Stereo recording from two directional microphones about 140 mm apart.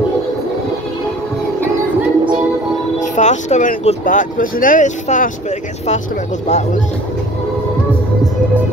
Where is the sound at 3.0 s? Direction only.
60° left (ahead or behind).